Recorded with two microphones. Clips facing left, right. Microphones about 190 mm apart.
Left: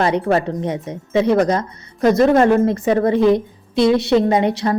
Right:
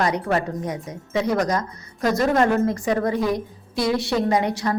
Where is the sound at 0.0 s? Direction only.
30° left (ahead or behind).